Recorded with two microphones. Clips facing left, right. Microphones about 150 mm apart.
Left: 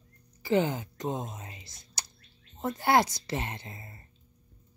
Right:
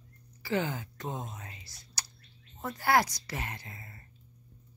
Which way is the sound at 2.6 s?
20° left (ahead or behind).